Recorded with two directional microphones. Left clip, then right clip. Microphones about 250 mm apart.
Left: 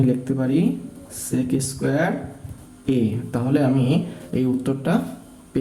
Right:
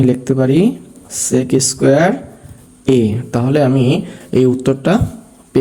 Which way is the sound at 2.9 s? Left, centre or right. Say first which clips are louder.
Right 9 dB; right.